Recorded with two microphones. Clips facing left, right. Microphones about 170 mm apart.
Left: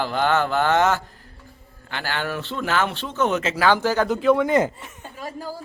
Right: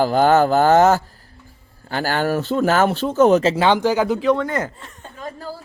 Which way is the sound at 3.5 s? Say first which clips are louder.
Right 3 dB; 20° right (ahead or behind).